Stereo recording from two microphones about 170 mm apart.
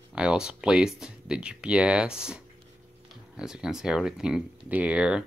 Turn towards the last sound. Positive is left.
turn(degrees=-5)  # may be behind; listen again after turning